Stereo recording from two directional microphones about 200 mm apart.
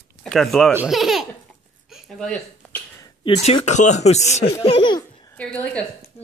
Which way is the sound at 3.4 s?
30° left (ahead or behind).